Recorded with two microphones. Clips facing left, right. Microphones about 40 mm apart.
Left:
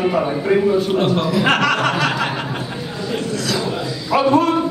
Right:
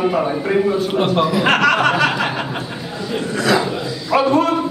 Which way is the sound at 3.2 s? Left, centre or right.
Centre.